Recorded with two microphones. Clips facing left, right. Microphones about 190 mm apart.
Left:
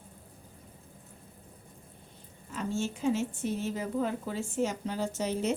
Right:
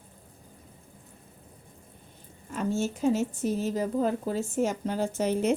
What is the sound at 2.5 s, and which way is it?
A woman's voice, 50° right (ahead or behind).